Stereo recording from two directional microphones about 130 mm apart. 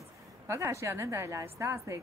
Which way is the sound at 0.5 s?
20° right (ahead or behind).